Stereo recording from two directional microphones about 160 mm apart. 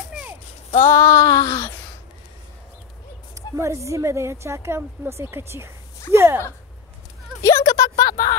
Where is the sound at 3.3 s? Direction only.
20° right (ahead or behind).